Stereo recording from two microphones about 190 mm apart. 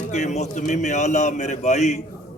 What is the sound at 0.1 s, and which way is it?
A man's voice, 40° left (ahead or behind).